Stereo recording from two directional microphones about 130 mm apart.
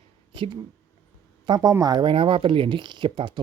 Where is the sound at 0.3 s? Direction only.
40° right (ahead or behind).